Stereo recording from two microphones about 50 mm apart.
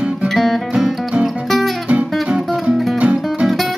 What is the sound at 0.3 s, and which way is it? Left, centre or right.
Music, centre.